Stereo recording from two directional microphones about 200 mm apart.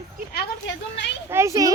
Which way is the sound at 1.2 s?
15° right (ahead or behind).